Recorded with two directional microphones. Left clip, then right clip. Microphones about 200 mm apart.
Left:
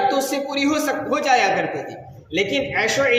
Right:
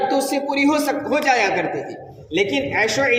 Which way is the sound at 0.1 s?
25° right (ahead or behind).